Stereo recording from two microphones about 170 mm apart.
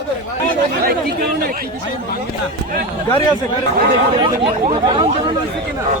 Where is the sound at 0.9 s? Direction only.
60° right (ahead or behind).